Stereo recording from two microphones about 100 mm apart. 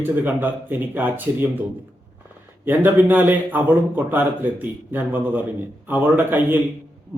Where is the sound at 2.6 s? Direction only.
20° right (ahead or behind).